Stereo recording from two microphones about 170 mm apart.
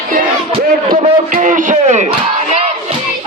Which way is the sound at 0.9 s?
50° right (ahead or behind).